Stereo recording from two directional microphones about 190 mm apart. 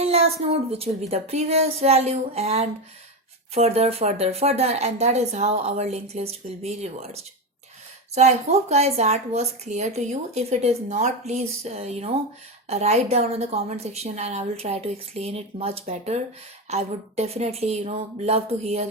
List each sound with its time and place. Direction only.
0.0 s speech: 30° right (ahead or behind)